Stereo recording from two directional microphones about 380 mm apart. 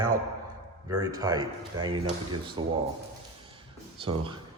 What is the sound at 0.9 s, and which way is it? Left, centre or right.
Speech, centre.